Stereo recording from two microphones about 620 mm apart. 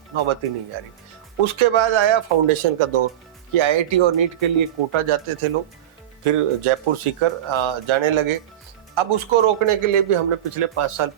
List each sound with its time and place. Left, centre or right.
0.1 s speech: right
1.5 s speech: right